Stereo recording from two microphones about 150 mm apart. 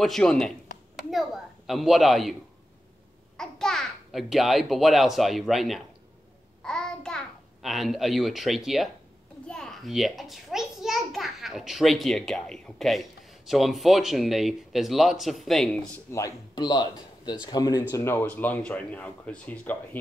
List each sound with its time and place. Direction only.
0.0 s speech: 5° left (ahead or behind)
1.1 s a sound: centre (ahead or behind)
3.3 s a child's voice: 5° left (ahead or behind)
16.1 s a man's voice: 20° left (ahead or behind)